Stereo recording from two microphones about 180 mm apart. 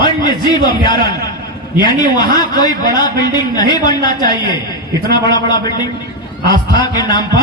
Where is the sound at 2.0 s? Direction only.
25° left (ahead or behind).